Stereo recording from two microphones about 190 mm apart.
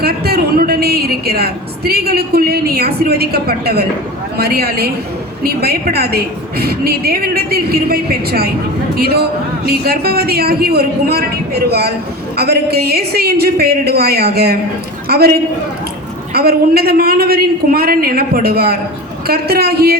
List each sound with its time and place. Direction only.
0.0 s a woman's voice: 55° right (ahead or behind)
16.3 s a woman's voice: 55° right (ahead or behind)